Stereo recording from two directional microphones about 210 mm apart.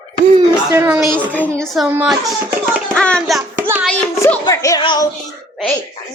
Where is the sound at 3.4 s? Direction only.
15° right (ahead or behind).